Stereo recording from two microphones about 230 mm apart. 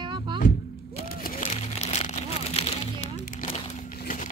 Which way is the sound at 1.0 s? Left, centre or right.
Left.